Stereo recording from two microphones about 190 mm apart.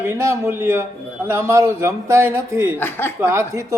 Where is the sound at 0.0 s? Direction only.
15° right (ahead or behind).